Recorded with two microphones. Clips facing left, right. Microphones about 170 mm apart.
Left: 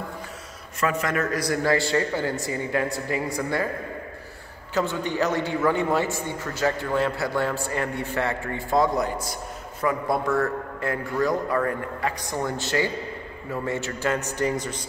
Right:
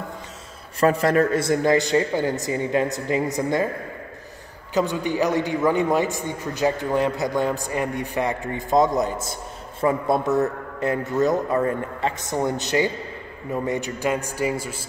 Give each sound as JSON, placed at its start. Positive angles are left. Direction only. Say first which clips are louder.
{"t": 0.7, "sound": "a man's voice", "louder": "right 7 dB", "side_deg": -35}
{"t": 4.7, "sound": "a man's voice", "louder": "right 3 dB", "side_deg": -15}